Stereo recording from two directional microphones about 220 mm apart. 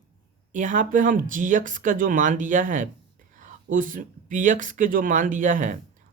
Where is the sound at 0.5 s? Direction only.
35° right (ahead or behind).